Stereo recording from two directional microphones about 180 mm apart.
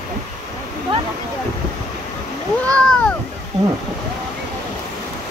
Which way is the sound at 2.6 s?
5° left (ahead or behind).